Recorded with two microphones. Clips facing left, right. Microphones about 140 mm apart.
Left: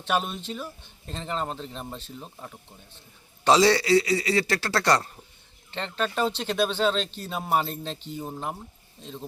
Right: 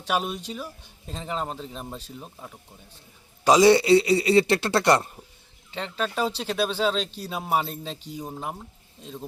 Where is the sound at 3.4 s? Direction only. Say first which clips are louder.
Right 3 dB; 15° right (ahead or behind).